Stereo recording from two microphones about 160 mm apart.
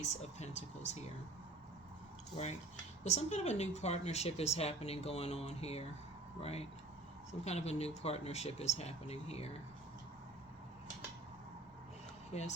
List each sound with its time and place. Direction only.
0.0 s speech: 45° left (ahead or behind)
2.3 s speech: 45° left (ahead or behind)
12.3 s speech: 45° left (ahead or behind)